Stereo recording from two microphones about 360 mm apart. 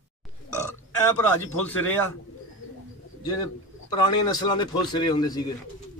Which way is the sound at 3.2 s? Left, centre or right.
Centre.